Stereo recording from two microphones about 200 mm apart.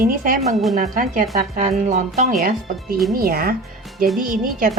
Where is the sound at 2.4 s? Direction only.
45° right (ahead or behind).